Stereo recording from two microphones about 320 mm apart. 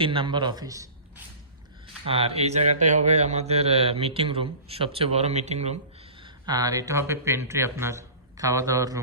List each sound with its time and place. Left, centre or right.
0.0 s a man's voice: centre